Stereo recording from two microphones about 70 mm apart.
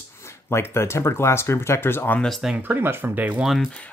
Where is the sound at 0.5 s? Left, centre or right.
Left.